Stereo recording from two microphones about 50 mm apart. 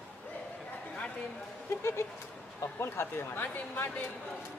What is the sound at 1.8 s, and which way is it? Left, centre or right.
Speech, left.